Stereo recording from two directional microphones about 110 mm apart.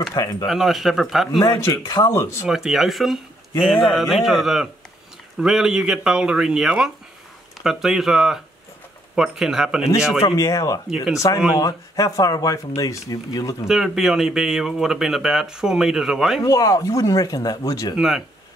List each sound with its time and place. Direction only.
0.1 s speech: 30° left (ahead or behind)
0.5 s speech: centre (ahead or behind)
1.4 s speech: 35° left (ahead or behind)
2.0 s speech: 25° left (ahead or behind)
2.4 s speech: 5° right (ahead or behind)
10.3 s speech: 35° left (ahead or behind)
13.7 s speech: 5° right (ahead or behind)
16.4 s speech: 30° left (ahead or behind)
17.9 s speech: 5° right (ahead or behind)